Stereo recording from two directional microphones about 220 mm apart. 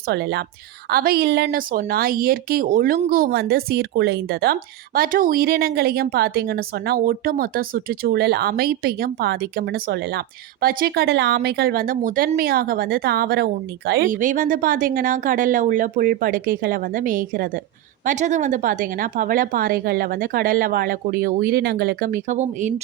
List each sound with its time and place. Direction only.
0.1 s a woman's voice: 50° right (ahead or behind)